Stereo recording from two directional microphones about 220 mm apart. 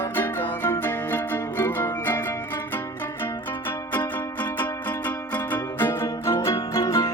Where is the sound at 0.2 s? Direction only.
10° left (ahead or behind).